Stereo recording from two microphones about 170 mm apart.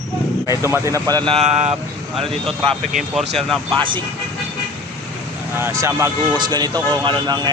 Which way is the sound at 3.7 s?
30° right (ahead or behind).